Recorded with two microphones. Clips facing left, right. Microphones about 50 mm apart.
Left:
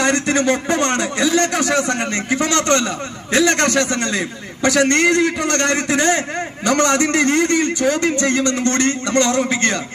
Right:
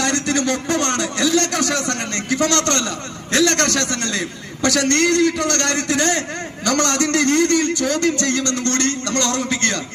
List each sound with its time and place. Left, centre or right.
0.0 s a man's voice: left